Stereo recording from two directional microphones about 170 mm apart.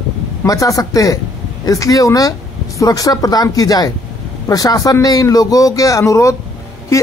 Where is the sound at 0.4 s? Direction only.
20° left (ahead or behind).